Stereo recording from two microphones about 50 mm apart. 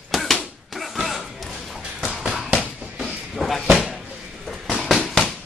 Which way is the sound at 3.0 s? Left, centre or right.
Centre.